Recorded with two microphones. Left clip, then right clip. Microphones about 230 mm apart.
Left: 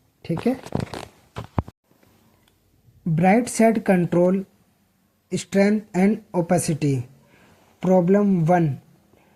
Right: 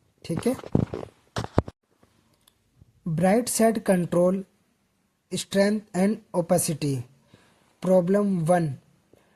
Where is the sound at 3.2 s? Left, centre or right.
Right.